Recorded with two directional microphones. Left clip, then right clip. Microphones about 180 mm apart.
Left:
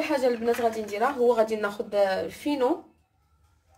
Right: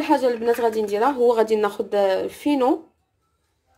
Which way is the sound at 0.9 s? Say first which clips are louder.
Right 4 dB; 50° right (ahead or behind).